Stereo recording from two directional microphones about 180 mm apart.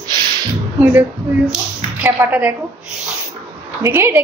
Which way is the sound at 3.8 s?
15° right (ahead or behind).